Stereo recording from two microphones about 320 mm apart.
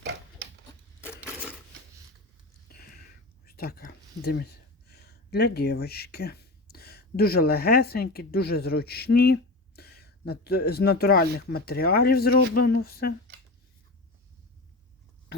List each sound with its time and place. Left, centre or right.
1.0 s coin: centre
2.6 s speech: left